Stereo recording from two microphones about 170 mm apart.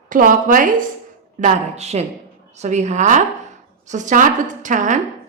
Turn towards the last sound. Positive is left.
turn(degrees=-50)  # may be behind; listen again after turning